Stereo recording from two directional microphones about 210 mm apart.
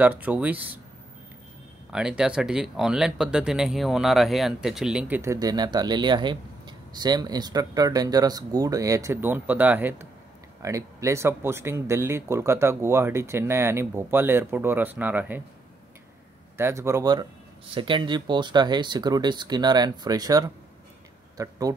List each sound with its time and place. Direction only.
0.0 s speech: 5° right (ahead or behind)
1.9 s speech: 5° right (ahead or behind)
16.5 s speech: 10° right (ahead or behind)